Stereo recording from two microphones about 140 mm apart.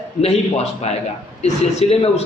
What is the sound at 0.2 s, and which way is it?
Speech, 50° left (ahead or behind).